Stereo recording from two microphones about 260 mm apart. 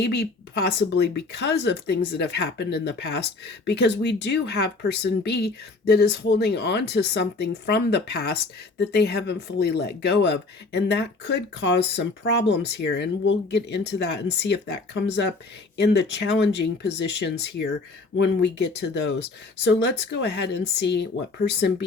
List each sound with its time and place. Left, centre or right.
0.0 s a woman's voice: left